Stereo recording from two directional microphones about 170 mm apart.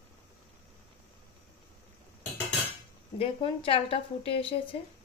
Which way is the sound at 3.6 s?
35° left (ahead or behind).